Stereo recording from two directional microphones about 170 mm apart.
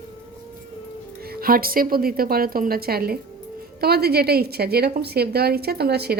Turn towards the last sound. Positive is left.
turn(degrees=-70)  # may be behind; listen again after turning